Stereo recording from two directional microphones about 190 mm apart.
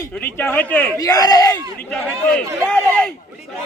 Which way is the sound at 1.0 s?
20° left (ahead or behind).